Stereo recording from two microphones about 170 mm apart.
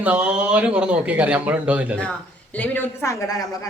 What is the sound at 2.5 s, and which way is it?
A woman's voice, 10° left (ahead or behind).